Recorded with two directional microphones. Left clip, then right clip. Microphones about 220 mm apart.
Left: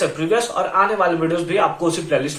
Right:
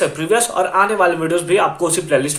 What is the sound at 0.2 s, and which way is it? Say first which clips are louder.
Speech: right 3 dB; 40° right (ahead or behind).